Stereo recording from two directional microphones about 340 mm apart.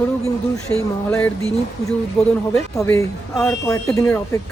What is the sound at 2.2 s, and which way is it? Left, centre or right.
Speech, centre.